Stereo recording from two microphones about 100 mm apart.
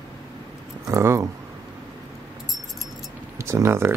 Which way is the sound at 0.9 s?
30° right (ahead or behind).